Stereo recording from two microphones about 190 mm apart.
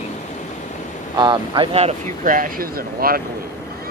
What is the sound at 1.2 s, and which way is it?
Speech, 25° right (ahead or behind).